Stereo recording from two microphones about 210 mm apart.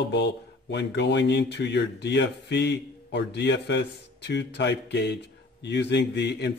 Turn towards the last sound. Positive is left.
turn(degrees=55)  # may be behind; listen again after turning